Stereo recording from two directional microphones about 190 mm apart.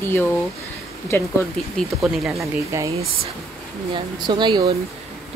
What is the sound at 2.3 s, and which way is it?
Speech, 15° right (ahead or behind).